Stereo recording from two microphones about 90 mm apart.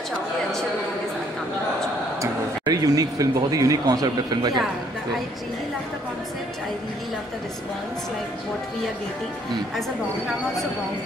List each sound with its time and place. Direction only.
2.6 s speech: 45° right (ahead or behind)
9.8 s speech: centre (ahead or behind)